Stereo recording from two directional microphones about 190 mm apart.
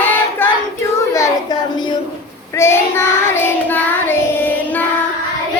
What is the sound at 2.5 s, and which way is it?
Child singing, 15° left (ahead or behind).